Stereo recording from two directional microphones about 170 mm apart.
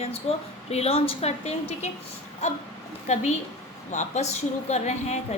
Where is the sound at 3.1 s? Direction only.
40° left (ahead or behind).